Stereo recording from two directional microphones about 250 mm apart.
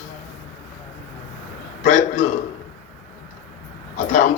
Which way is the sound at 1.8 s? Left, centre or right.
Left.